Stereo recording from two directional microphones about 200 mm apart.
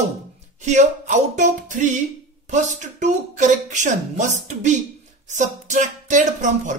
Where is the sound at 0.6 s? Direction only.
35° right (ahead or behind).